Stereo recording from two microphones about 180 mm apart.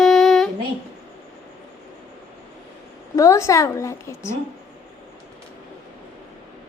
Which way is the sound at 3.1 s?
15° left (ahead or behind).